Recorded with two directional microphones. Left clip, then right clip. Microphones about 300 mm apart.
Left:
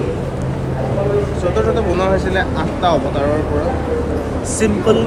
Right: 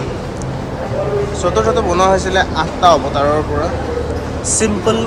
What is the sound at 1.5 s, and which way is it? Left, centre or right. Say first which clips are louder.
Speech: right 3 dB; centre.